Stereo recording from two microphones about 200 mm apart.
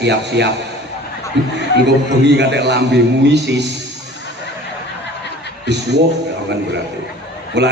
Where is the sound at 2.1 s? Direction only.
60° right (ahead or behind).